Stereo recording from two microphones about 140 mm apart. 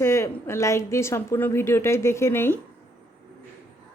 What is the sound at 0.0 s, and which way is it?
A woman's voice, 20° left (ahead or behind).